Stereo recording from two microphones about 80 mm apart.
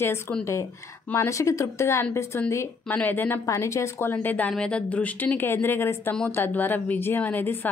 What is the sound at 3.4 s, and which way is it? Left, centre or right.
A woman's voice, left.